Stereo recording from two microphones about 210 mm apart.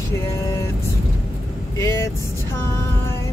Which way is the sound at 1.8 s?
15° left (ahead or behind).